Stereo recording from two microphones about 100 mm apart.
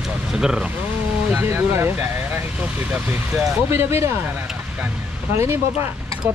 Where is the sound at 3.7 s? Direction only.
25° right (ahead or behind).